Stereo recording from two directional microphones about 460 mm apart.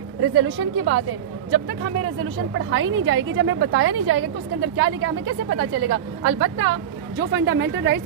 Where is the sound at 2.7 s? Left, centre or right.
Right.